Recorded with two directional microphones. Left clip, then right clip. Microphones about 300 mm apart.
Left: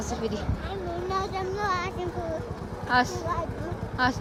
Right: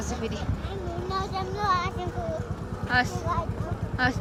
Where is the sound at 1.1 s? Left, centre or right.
Left.